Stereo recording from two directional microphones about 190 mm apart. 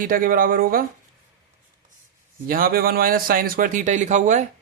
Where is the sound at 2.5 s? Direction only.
50° right (ahead or behind).